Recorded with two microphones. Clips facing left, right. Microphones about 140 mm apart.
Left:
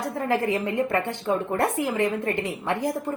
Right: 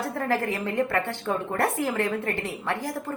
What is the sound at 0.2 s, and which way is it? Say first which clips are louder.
A woman's voice: left 3 dB; 20° left (ahead or behind).